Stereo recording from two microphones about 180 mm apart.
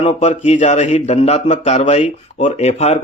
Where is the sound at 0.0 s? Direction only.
40° left (ahead or behind).